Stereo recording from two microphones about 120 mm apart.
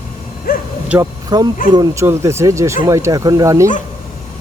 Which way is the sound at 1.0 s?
35° right (ahead or behind).